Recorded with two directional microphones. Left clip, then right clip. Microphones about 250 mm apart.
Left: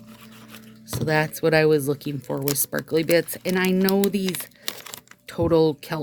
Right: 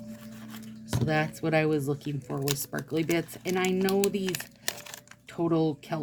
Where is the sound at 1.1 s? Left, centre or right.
Left.